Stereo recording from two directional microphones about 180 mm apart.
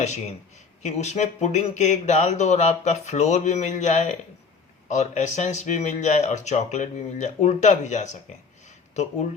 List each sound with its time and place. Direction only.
0.0 s speech: 40° left (ahead or behind)